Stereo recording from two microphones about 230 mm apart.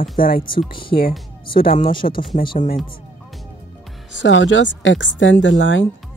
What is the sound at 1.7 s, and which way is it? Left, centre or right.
Speech, left.